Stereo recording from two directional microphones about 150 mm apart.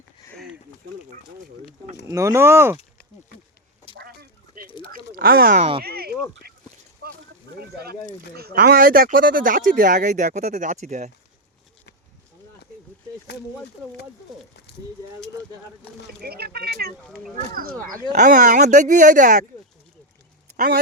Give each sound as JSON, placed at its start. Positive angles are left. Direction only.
{"t": 2.0, "sound": "speech", "side_deg": -20}
{"t": 3.9, "sound": "a sound", "side_deg": -90}
{"t": 5.5, "sound": "speech", "side_deg": -40}
{"t": 5.8, "sound": "a sound", "side_deg": -90}
{"t": 7.6, "sound": "speech", "side_deg": -90}
{"t": 14.7, "sound": "a sound", "side_deg": 90}
{"t": 16.2, "sound": "speech", "side_deg": -90}
{"t": 17.5, "sound": "speech", "side_deg": -80}
{"t": 18.1, "sound": "speech", "side_deg": -60}